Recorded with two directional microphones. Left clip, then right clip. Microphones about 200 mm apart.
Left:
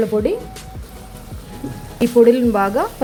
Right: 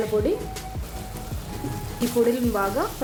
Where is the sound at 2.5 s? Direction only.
35° left (ahead or behind).